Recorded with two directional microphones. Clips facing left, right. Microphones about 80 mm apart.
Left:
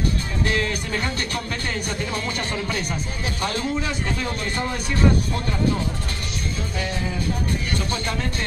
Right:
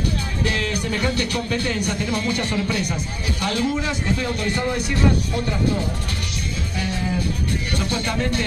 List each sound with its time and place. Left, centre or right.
0.5 s music: left
3.3 s a man's voice: left
7.8 s music: left